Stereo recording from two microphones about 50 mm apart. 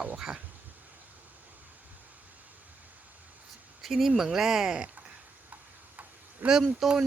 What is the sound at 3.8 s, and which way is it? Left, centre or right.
Speech, centre.